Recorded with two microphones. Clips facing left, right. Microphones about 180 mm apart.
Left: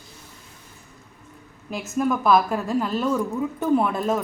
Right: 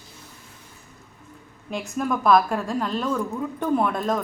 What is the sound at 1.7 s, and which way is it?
A woman's voice, centre (ahead or behind).